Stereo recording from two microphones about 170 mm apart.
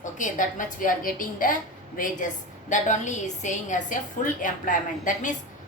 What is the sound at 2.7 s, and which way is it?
A woman's voice, 45° left (ahead or behind).